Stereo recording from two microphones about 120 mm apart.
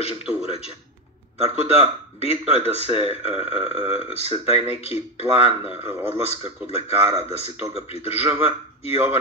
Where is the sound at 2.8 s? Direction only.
50° left (ahead or behind).